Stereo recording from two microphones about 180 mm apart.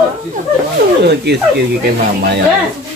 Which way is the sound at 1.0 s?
65° right (ahead or behind).